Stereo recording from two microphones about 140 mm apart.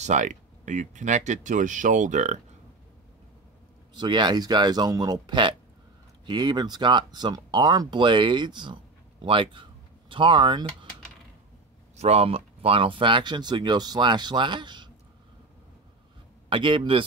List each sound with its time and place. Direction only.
0.0 s speech: 60° right (ahead or behind)
3.9 s speech: 35° right (ahead or behind)
12.0 s speech: 45° right (ahead or behind)
16.4 s speech: 40° right (ahead or behind)